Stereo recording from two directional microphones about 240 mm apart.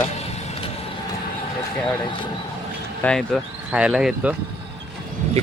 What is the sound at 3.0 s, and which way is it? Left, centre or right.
Speech, centre.